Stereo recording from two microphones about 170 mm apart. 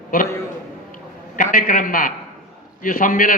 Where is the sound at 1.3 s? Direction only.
50° left (ahead or behind).